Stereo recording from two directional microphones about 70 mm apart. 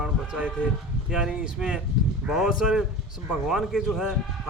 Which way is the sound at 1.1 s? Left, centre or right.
Centre.